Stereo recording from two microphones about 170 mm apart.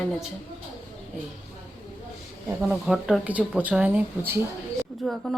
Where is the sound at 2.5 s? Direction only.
5° right (ahead or behind).